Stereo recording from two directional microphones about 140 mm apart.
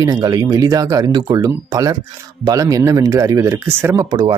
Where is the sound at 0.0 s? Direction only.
25° right (ahead or behind).